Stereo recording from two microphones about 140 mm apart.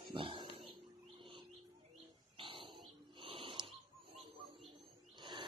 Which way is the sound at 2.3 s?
40° right (ahead or behind).